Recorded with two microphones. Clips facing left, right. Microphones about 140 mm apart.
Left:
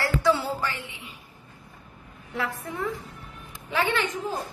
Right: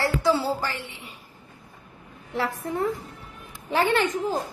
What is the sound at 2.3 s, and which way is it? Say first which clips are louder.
A woman's voice: right 4 dB; 35° right (ahead or behind).